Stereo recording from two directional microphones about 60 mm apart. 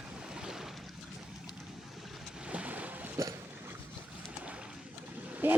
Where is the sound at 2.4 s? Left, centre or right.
Right.